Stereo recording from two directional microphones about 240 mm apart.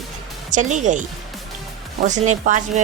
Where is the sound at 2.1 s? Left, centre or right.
Right.